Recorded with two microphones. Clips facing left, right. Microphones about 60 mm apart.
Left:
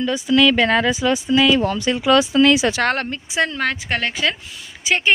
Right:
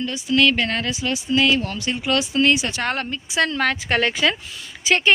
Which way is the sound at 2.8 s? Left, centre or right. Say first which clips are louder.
Left 4 dB; left.